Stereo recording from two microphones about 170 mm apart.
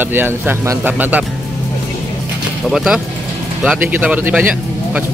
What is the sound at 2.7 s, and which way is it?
Speech, centre (ahead or behind).